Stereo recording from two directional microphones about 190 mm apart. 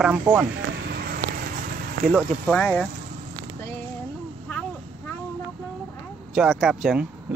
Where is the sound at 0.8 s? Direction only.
55° right (ahead or behind).